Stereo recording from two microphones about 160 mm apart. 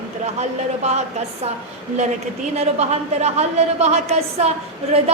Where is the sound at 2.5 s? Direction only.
45° right (ahead or behind).